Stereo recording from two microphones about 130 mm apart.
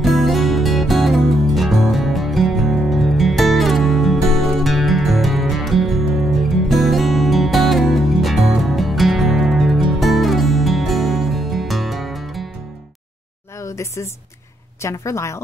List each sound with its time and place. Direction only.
0.0 s music: centre (ahead or behind)
13.6 s a sound: 20° left (ahead or behind)
14.8 s a woman's voice: 20° left (ahead or behind)